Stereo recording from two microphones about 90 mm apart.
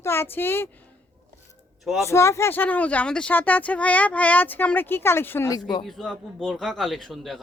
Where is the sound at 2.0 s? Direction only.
30° left (ahead or behind).